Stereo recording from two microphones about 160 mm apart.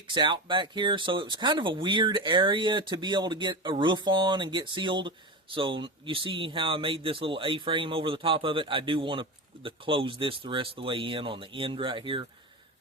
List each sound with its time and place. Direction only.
0.1 s speech: 30° right (ahead or behind)